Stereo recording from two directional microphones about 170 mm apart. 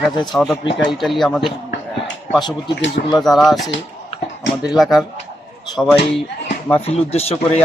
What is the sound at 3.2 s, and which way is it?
Speech, centre (ahead or behind).